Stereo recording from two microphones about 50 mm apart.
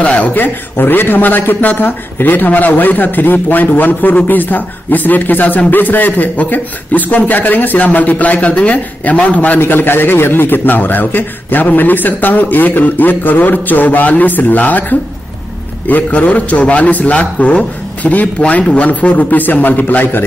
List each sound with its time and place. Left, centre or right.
0.0 s a man's voice: left
0.3 s a man's voice: left
9.6 s a man's voice: left